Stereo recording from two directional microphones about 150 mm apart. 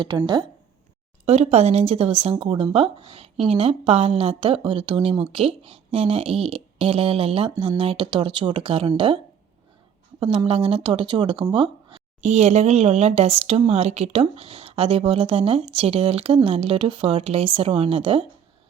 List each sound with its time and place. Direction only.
1.2 s speech: 45° right (ahead or behind)
12.2 s speech: 50° right (ahead or behind)